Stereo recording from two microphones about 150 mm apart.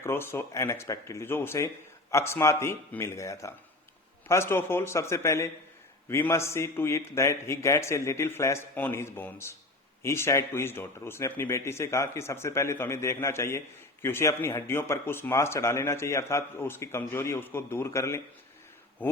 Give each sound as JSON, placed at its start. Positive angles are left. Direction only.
{"t": 0.0, "sound": "speech", "side_deg": 15}